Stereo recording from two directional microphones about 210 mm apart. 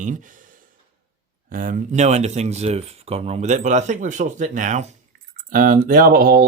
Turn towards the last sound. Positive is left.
turn(degrees=-45)  # may be behind; listen again after turning